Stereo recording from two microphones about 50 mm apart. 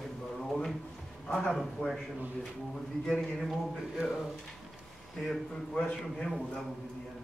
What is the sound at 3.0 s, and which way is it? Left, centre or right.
Speech, centre.